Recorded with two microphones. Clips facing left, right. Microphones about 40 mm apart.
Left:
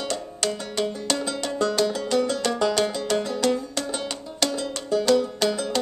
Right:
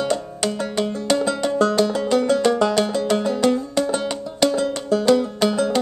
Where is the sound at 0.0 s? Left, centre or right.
Centre.